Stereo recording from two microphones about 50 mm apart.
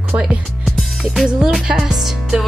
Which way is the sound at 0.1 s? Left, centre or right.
Right.